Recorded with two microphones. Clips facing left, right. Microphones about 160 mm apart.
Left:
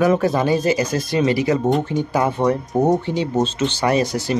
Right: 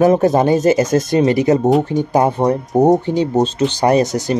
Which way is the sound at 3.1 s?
40° right (ahead or behind).